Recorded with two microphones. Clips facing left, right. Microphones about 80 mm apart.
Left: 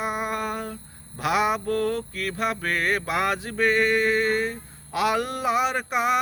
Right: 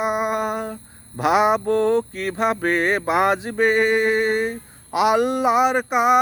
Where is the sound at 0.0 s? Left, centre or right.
Centre.